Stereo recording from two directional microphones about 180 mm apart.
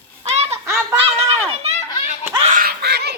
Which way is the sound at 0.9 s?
30° right (ahead or behind).